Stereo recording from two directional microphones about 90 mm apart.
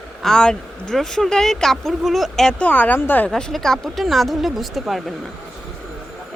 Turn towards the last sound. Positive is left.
turn(degrees=0)  # may be behind; listen again after turning